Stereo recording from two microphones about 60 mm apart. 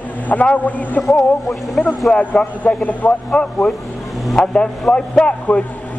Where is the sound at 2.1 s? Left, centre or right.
Centre.